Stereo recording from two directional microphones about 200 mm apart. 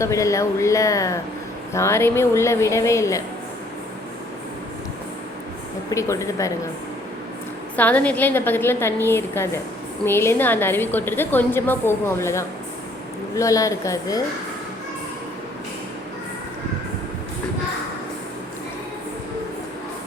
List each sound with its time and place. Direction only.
0.0 s a woman's voice: 15° left (ahead or behind)
5.9 s a woman's voice: 15° left (ahead or behind)
7.8 s a woman's voice: 5° left (ahead or behind)